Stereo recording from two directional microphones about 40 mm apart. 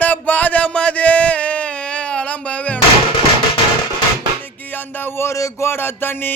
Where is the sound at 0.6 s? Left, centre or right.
Left.